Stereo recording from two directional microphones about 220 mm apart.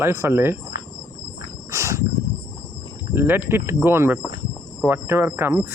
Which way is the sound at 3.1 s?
10° right (ahead or behind).